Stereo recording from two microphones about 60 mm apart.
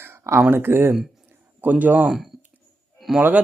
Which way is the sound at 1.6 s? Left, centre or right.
Right.